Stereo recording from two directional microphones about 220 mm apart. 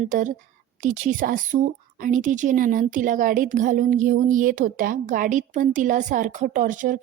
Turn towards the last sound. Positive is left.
turn(degrees=-35)  # may be behind; listen again after turning